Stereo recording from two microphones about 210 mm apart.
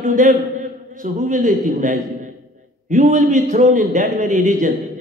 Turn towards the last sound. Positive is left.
turn(degrees=-40)  # may be behind; listen again after turning